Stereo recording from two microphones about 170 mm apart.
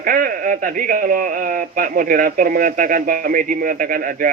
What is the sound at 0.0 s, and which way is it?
Speech, 55° right (ahead or behind).